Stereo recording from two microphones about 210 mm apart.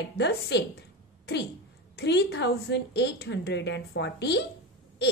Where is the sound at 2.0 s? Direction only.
50° left (ahead or behind).